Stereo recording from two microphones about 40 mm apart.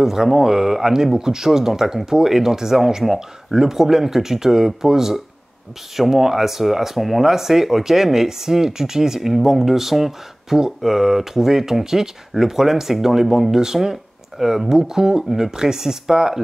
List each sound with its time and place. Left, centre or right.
0.0 s speech: centre